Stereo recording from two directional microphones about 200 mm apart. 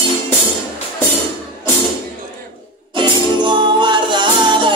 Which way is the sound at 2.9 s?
25° right (ahead or behind).